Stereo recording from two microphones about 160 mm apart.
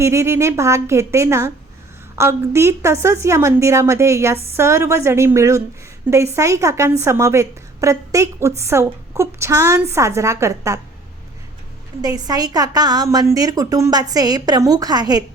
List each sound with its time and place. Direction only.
0.0 s a woman's voice: 15° right (ahead or behind)
12.0 s a woman's voice: 25° right (ahead or behind)